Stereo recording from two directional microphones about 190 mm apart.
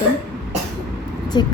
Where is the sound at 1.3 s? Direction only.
25° left (ahead or behind).